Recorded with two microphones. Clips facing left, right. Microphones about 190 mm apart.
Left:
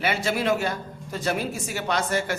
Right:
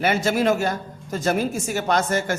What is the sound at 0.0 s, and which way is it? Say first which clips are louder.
A woman's voice: right 5 dB; 45° right (ahead or behind).